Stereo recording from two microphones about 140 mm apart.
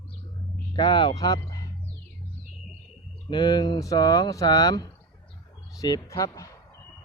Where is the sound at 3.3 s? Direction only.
30° left (ahead or behind).